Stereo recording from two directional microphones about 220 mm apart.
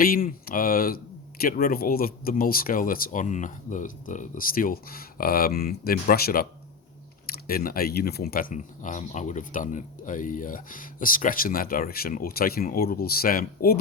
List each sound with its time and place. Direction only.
0.0 s speech: 40° left (ahead or behind)